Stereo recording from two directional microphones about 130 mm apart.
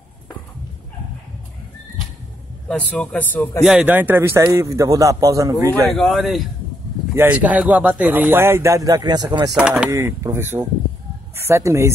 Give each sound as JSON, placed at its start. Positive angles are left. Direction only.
{"t": 2.7, "sound": "a man's voice", "side_deg": 10}
{"t": 3.6, "sound": "a man's voice", "side_deg": -10}
{"t": 5.9, "sound": "speech", "side_deg": 0}
{"t": 7.2, "sound": "speech", "side_deg": -10}
{"t": 9.6, "sound": "speech", "side_deg": -10}
{"t": 9.8, "sound": "a man's voice", "side_deg": -20}